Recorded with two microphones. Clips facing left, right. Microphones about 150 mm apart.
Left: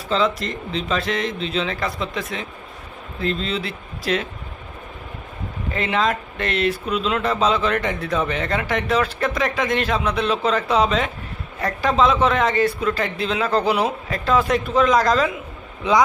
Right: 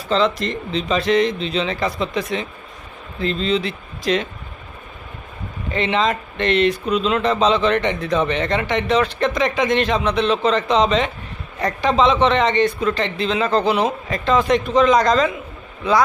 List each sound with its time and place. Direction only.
0.1 s speech: 5° left (ahead or behind)
5.7 s speech: centre (ahead or behind)
15.8 s speech: 15° left (ahead or behind)